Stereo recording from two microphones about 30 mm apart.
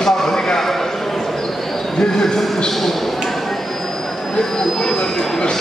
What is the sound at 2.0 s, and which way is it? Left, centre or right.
Speech, centre.